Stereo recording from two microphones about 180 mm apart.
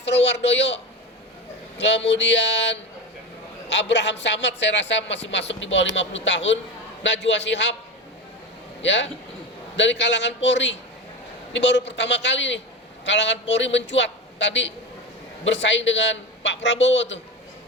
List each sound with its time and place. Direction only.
0.0 s a woman's voice: 75° left (ahead or behind)
1.8 s a man's voice: 75° left (ahead or behind)
8.8 s a man's voice: 85° left